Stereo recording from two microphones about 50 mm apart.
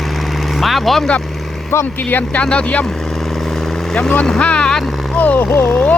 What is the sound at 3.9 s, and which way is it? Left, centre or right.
Speech, centre.